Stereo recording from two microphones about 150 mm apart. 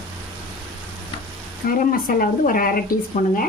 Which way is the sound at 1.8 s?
70° left (ahead or behind).